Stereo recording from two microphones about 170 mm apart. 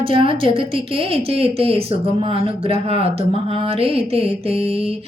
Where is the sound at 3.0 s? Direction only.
35° right (ahead or behind).